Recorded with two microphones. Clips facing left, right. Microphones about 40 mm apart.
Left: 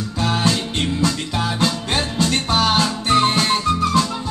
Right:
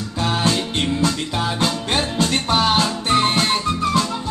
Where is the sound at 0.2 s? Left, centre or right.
Centre.